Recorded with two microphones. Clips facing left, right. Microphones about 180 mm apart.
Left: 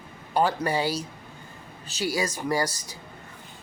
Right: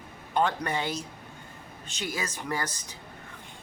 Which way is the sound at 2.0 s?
10° left (ahead or behind).